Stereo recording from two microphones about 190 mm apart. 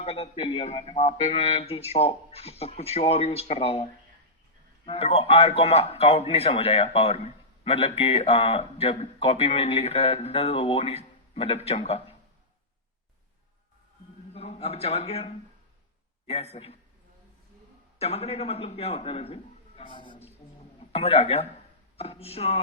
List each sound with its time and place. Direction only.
0.0 s a man's voice: 30° left (ahead or behind)
4.9 s a man's voice: 30° left (ahead or behind)
14.3 s a man's voice: 35° left (ahead or behind)
18.0 s a man's voice: 35° left (ahead or behind)